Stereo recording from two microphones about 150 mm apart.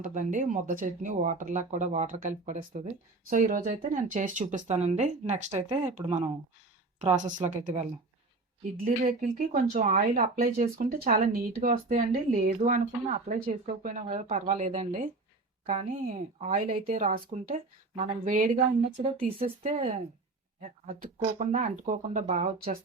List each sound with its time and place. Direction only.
0.0 s speech: 55° right (ahead or behind); by 6.3 s 40° right (ahead or behind)
7.2 s speech: 55° right (ahead or behind)
8.8 s speech: 60° right (ahead or behind); by 12.5 s 75° right (ahead or behind)
12.6 s speech: 55° right (ahead or behind)
16.9 s speech: 55° right (ahead or behind)
19.1 s speech: 75° right (ahead or behind)
19.6 s speech: 50° right (ahead or behind)